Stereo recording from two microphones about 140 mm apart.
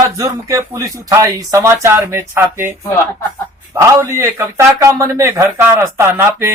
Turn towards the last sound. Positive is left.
turn(degrees=-15)  # may be behind; listen again after turning